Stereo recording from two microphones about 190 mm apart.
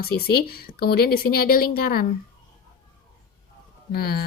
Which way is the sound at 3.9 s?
55° left (ahead or behind).